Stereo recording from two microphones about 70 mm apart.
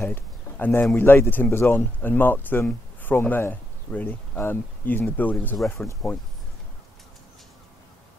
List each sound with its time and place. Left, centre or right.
0.1 s a sound: left
0.9 s speech: left
5.6 s speech: centre